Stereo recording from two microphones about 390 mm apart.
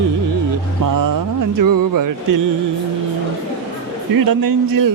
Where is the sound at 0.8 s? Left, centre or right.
Right.